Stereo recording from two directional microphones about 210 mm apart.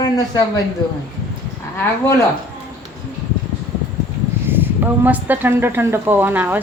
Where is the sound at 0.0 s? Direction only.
20° left (ahead or behind).